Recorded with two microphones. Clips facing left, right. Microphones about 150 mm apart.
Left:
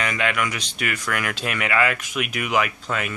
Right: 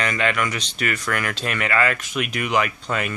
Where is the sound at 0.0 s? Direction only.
10° left (ahead or behind).